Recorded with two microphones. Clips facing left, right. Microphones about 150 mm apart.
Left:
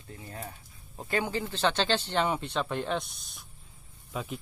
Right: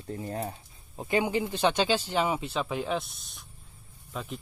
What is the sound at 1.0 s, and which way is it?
Speech, 15° right (ahead or behind).